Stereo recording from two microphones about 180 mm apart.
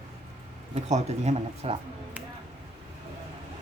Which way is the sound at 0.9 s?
40° right (ahead or behind).